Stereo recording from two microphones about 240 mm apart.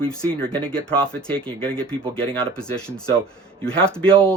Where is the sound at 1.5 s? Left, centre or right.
Centre.